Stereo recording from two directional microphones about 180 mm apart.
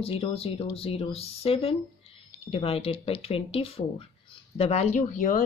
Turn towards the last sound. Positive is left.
turn(degrees=45)  # may be behind; listen again after turning